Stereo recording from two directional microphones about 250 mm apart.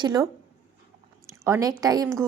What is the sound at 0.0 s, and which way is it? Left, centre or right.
Speech, centre.